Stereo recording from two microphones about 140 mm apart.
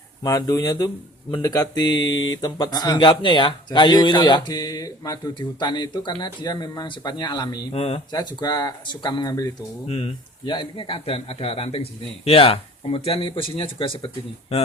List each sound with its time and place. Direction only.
0.2 s speech: 25° left (ahead or behind)
7.7 s speech: 45° left (ahead or behind)
8.1 s speech: 30° left (ahead or behind)
9.8 s speech: 45° left (ahead or behind)
10.4 s speech: 35° left (ahead or behind)